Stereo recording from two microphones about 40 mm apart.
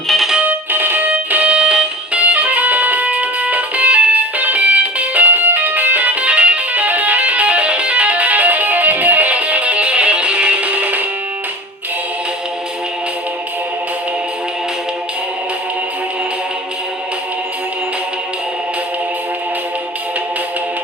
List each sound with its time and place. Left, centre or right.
0.4 s music: right
6.7 s music: right